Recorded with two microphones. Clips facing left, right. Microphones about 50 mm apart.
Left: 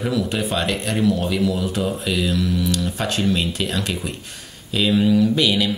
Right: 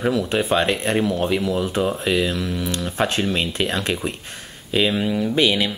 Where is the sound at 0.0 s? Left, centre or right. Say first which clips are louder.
Right 2 dB; right.